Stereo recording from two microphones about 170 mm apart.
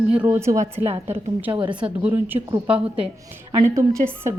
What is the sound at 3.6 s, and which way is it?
Speech, 15° right (ahead or behind).